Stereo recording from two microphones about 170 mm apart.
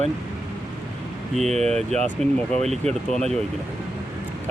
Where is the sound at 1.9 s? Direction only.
5° left (ahead or behind).